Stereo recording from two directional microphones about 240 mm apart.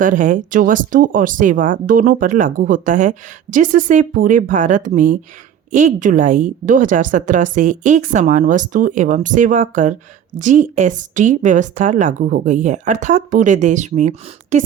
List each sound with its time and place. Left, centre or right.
0.0 s speech: right